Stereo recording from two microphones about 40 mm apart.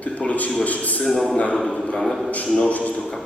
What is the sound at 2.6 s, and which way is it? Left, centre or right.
Speech, left.